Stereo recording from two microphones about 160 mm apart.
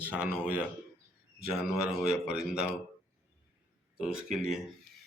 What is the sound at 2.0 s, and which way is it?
Speech, 5° right (ahead or behind).